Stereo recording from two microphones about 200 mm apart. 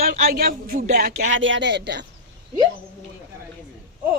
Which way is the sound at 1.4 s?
65° right (ahead or behind).